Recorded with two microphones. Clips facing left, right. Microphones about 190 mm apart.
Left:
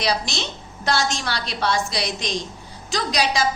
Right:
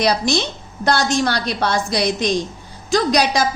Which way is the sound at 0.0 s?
45° right (ahead or behind).